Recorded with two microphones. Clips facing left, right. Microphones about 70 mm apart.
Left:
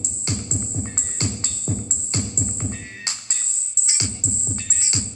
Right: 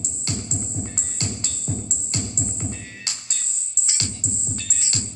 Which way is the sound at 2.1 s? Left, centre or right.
Left.